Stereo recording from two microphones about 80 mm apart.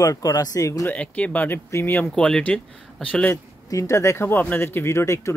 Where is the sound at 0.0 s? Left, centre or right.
Left.